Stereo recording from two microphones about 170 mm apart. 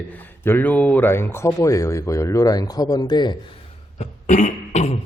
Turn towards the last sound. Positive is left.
turn(degrees=45)  # may be behind; listen again after turning